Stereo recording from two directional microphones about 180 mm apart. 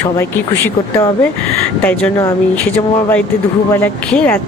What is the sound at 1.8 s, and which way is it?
Speech, 5° left (ahead or behind).